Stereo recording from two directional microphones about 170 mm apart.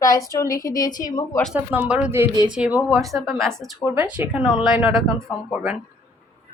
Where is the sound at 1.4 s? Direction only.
5° right (ahead or behind).